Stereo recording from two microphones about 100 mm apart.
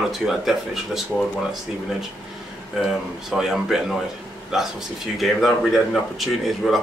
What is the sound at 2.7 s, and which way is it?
A man's voice, 5° right (ahead or behind).